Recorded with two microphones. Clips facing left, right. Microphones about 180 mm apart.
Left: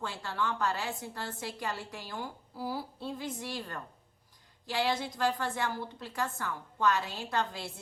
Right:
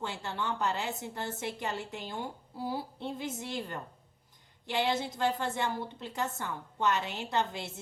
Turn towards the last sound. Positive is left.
turn(degrees=-20)  # may be behind; listen again after turning